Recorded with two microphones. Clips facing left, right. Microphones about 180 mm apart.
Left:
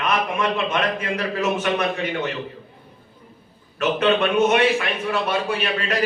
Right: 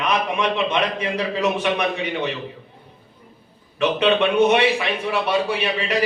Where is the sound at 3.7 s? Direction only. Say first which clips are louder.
Right 1 dB; 15° right (ahead or behind).